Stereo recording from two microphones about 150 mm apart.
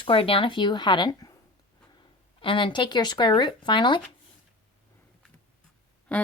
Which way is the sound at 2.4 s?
35° left (ahead or behind).